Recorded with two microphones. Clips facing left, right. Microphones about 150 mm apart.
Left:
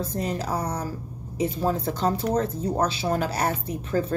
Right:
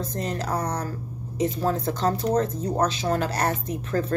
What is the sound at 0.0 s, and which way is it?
Speech, 10° left (ahead or behind).